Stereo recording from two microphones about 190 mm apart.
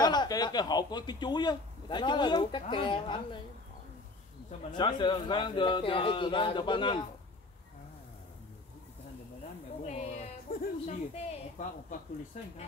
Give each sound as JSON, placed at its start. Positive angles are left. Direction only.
{"t": 0.0, "sound": "a man's voice", "side_deg": 20}
{"t": 4.7, "sound": "a man's voice", "side_deg": 25}
{"t": 9.8, "sound": "speech", "side_deg": 35}
{"t": 10.5, "sound": "a woman's voice", "side_deg": 50}